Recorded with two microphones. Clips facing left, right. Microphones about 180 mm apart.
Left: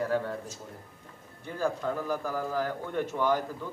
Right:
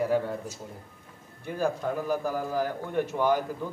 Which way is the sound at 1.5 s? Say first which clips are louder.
Right 2 dB; 15° right (ahead or behind).